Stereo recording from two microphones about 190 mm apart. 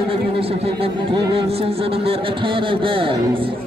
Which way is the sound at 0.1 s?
30° right (ahead or behind).